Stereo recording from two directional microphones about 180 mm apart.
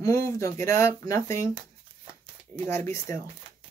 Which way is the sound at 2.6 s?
15° left (ahead or behind).